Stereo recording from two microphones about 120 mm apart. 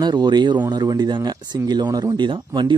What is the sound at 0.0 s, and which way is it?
Speech, 35° right (ahead or behind).